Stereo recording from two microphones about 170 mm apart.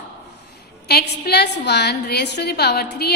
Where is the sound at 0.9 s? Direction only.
70° left (ahead or behind).